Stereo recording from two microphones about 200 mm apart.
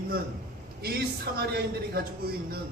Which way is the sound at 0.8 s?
50° right (ahead or behind).